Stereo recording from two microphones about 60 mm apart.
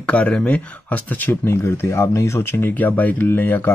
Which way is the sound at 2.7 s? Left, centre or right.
Left.